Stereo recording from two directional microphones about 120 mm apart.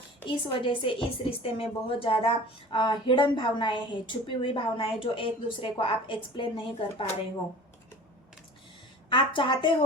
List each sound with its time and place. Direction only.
0.3 s a woman's voice: 45° left (ahead or behind)
9.0 s a woman's voice: 45° left (ahead or behind)